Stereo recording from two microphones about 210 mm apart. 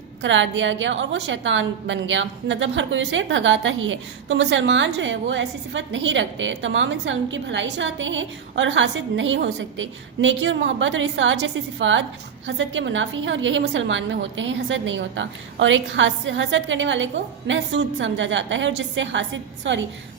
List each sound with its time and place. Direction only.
0.2 s a woman's voice: 60° right (ahead or behind)